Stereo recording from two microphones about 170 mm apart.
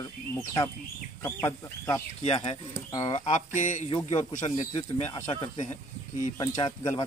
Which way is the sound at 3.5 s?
45° left (ahead or behind).